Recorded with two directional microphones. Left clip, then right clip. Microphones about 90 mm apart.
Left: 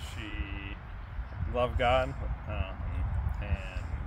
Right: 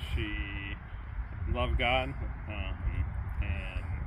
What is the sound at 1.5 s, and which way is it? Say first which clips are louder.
Speech: left 3 dB; 55° left (ahead or behind).